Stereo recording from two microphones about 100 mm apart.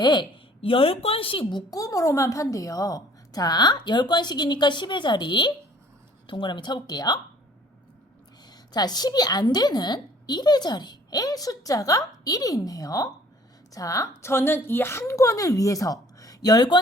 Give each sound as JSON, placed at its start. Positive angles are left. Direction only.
{"t": 0.0, "sound": "a woman's voice", "side_deg": 50}
{"t": 0.6, "sound": "a woman's voice", "side_deg": 70}
{"t": 1.7, "sound": "a woman's voice", "side_deg": 35}
{"t": 8.4, "sound": "a woman's voice", "side_deg": 45}